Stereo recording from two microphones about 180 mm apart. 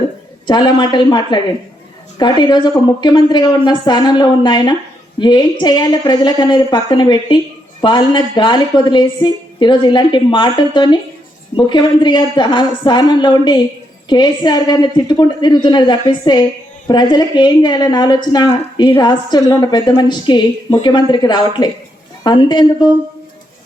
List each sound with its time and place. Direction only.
0.4 s a woman's voice: 25° left (ahead or behind)